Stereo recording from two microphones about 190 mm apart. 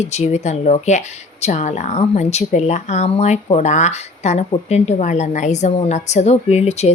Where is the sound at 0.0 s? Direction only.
35° left (ahead or behind).